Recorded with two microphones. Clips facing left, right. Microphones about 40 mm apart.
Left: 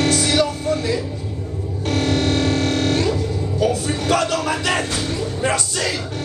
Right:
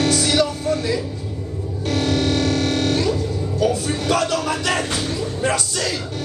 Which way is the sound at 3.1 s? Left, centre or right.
Centre.